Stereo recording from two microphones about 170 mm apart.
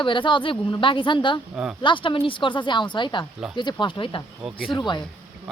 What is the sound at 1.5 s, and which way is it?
Speech, 5° right (ahead or behind).